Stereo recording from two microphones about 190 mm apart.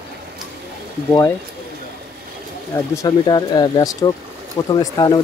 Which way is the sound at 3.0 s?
20° left (ahead or behind).